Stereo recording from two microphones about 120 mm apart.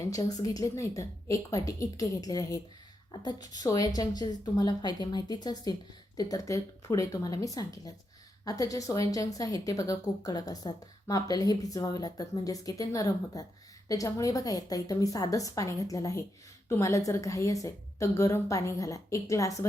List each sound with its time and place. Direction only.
0.0 s a woman's voice: 30° left (ahead or behind)